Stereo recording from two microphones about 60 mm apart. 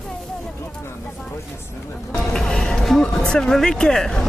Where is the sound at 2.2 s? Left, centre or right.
Centre.